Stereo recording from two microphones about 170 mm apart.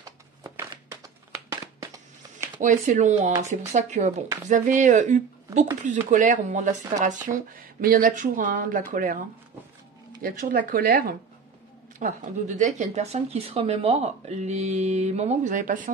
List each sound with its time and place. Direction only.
0.0 s crumpling: 20° right (ahead or behind)
2.6 s speech: 45° right (ahead or behind)
10.2 s speech: 55° right (ahead or behind)
12.0 s speech: 45° right (ahead or behind)